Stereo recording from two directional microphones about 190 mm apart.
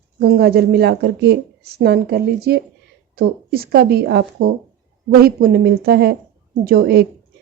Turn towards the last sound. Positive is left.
turn(degrees=-55)  # may be behind; listen again after turning